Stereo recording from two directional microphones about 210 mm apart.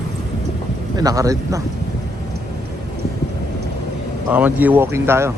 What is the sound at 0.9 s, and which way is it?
Speech, 15° right (ahead or behind).